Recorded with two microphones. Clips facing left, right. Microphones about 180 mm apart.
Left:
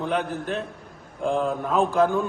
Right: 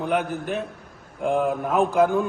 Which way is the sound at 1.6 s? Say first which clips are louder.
Even; 5° right (ahead or behind).